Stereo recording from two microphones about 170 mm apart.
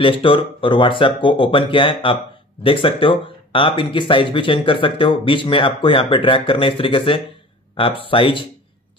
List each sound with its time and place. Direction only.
0.0 s speech: 30° left (ahead or behind)